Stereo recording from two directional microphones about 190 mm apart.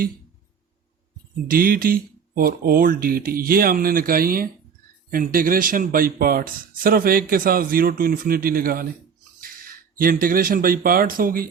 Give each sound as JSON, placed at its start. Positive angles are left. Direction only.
{"t": 1.5, "sound": "a man's voice", "side_deg": -50}